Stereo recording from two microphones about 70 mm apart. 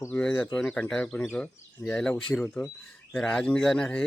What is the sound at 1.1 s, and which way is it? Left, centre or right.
Speech, left.